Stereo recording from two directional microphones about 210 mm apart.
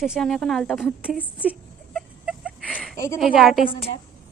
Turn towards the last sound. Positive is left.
turn(degrees=0)  # may be behind; listen again after turning